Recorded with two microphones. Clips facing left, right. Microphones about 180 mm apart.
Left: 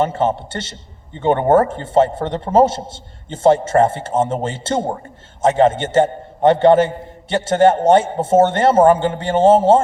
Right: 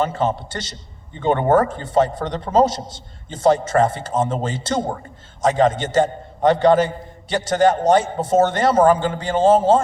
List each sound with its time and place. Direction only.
0.0 s a man's voice: 25° left (ahead or behind)